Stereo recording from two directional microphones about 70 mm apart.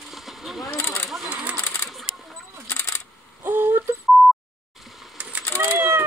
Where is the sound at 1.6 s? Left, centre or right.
Left.